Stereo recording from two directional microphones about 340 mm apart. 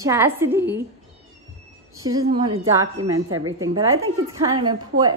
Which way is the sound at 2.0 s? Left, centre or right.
Centre.